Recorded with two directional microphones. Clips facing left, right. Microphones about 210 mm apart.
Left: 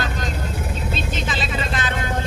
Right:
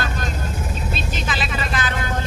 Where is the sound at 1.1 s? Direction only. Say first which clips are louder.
Left 1 dB; 25° left (ahead or behind).